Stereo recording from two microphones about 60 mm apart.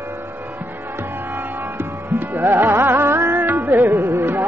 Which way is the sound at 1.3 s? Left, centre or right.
Right.